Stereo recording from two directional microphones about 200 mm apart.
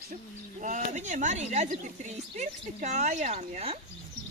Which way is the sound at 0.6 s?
40° right (ahead or behind).